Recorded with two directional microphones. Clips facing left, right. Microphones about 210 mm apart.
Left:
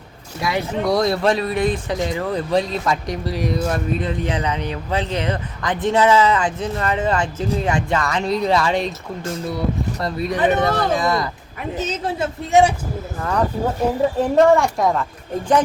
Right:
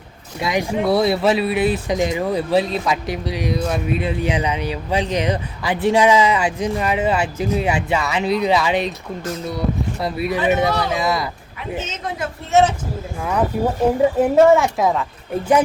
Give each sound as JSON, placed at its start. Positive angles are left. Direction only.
{"t": 0.3, "sound": "speech", "side_deg": -20}
{"t": 10.0, "sound": "speech", "side_deg": -5}
{"t": 10.7, "sound": "speech", "side_deg": 50}
{"t": 10.9, "sound": "speech", "side_deg": 0}
{"t": 11.8, "sound": "a woman's voice", "side_deg": 35}
{"t": 12.5, "sound": "speech", "side_deg": 15}
{"t": 14.0, "sound": "speech", "side_deg": -5}